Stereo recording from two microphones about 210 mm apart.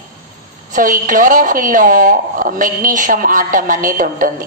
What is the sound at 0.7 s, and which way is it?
A woman's voice, 40° right (ahead or behind).